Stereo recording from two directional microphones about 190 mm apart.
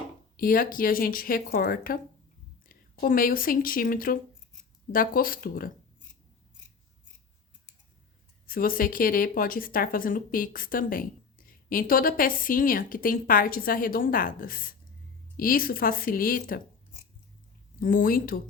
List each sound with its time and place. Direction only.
0.3 s a woman's voice: 50° left (ahead or behind)
8.4 s a woman's voice: 50° left (ahead or behind)
17.7 s a woman's voice: 45° left (ahead or behind)